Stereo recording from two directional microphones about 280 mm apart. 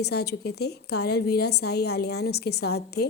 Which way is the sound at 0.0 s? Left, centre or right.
Left.